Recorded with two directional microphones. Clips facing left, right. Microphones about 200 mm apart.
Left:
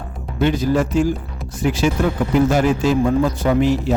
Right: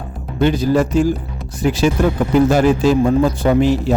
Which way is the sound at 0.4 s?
35° right (ahead or behind).